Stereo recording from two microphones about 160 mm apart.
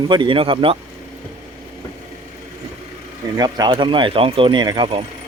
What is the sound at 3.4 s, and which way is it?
Speech, 25° right (ahead or behind).